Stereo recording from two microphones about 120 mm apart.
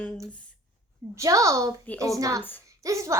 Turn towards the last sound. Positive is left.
turn(degrees=-25)  # may be behind; listen again after turning